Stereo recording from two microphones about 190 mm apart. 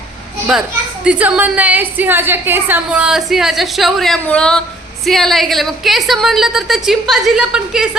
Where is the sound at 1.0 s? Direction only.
5° right (ahead or behind).